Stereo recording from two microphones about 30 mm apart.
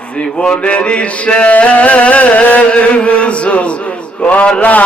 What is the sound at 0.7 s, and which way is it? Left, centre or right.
Music, left.